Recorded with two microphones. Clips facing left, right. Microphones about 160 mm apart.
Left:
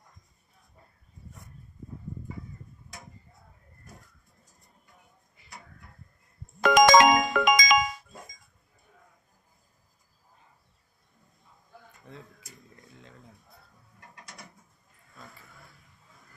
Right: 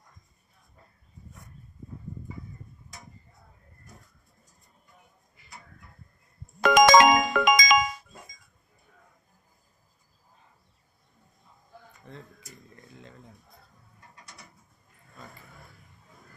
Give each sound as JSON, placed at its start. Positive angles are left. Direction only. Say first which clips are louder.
{"t": 6.6, "sound": "music", "louder": "right 1 dB", "side_deg": -5}
{"t": 7.4, "sound": "music", "louder": "right 1 dB", "side_deg": -85}
{"t": 12.1, "sound": "speech", "louder": "right 1 dB", "side_deg": 5}